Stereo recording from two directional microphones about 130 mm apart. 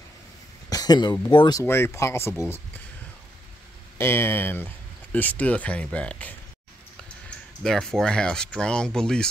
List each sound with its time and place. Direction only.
0.7 s a sound: 30° left (ahead or behind)
1.5 s speech: 20° left (ahead or behind)
4.0 s speech: 20° left (ahead or behind)